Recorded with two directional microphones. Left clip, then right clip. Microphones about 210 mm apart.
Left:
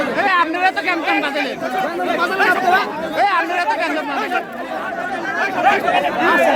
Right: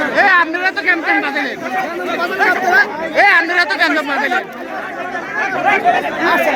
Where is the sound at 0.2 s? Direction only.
10° right (ahead or behind).